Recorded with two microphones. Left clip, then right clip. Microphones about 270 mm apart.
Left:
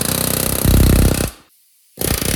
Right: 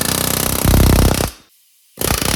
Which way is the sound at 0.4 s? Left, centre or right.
Centre.